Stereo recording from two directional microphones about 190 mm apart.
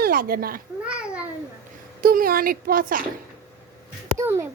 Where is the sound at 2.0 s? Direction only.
50° right (ahead or behind).